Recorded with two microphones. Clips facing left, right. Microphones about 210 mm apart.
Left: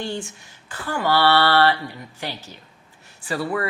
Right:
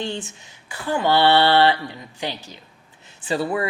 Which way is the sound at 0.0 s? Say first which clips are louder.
Even; 20° right (ahead or behind).